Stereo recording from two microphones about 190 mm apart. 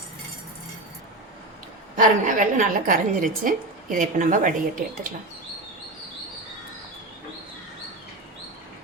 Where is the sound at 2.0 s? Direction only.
45° right (ahead or behind).